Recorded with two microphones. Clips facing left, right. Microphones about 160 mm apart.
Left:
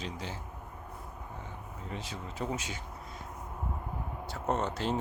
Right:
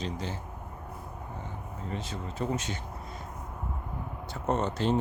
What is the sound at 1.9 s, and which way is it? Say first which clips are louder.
Speech: right 3 dB; 10° left (ahead or behind).